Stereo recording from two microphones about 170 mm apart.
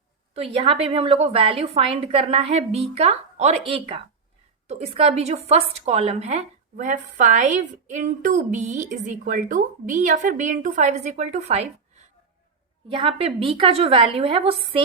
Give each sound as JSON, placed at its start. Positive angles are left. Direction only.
{"t": 0.5, "sound": "a woman's voice", "side_deg": -35}